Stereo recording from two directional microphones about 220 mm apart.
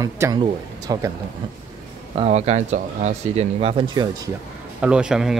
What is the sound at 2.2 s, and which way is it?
Speech, 30° right (ahead or behind).